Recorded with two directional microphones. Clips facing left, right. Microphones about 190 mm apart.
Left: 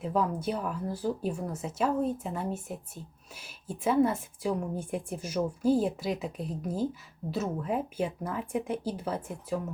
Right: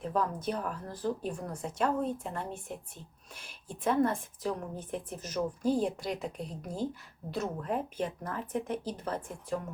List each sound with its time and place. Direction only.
0.0 s speech: 10° left (ahead or behind)